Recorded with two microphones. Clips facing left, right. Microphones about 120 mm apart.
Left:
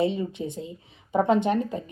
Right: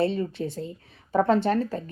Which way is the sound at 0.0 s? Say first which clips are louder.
Even; 15° left (ahead or behind).